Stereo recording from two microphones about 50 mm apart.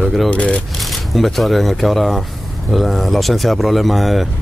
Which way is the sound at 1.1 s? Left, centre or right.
Centre.